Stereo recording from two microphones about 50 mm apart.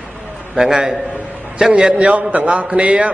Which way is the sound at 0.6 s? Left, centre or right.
Centre.